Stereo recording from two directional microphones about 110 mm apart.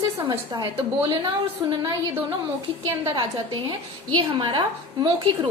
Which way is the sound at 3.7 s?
45° right (ahead or behind).